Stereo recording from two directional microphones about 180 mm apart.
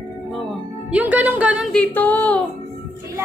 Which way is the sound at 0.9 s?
10° right (ahead or behind).